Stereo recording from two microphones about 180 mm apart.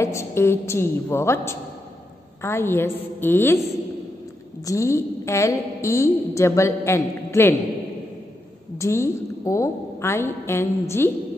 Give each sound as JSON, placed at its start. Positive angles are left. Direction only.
{"t": 0.0, "sound": "a woman's voice", "side_deg": 15}
{"t": 4.6, "sound": "a woman's voice", "side_deg": 15}
{"t": 8.7, "sound": "a woman's voice", "side_deg": 15}